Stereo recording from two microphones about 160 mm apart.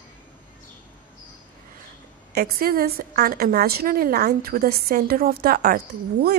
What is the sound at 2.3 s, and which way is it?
A woman's voice, 75° right (ahead or behind).